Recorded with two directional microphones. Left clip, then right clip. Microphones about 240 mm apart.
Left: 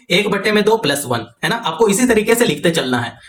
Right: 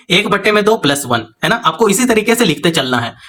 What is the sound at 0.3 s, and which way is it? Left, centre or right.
Speech, right.